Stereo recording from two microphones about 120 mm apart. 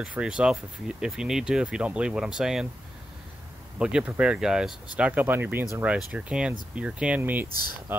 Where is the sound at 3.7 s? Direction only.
10° right (ahead or behind).